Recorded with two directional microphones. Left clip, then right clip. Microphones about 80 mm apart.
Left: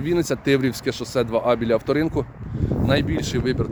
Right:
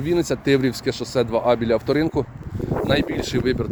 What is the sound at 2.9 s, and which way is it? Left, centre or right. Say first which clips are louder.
Speech: even; centre.